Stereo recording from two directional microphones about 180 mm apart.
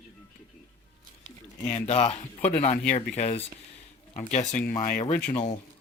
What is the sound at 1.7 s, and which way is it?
Speech, 35° left (ahead or behind).